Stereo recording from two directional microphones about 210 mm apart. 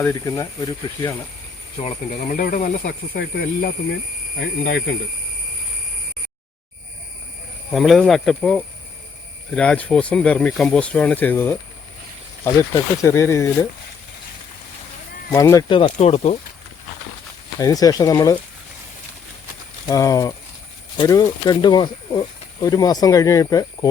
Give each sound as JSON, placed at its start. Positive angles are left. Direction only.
{"t": 0.0, "sound": "speech", "side_deg": 10}
{"t": 1.8, "sound": "speech", "side_deg": 35}
{"t": 7.7, "sound": "speech", "side_deg": 0}
{"t": 15.3, "sound": "speech", "side_deg": 15}
{"t": 17.6, "sound": "speech", "side_deg": 15}
{"t": 19.9, "sound": "speech", "side_deg": 15}